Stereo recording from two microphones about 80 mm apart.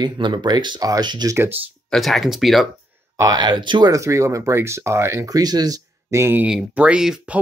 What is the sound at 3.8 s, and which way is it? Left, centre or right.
Speech, right.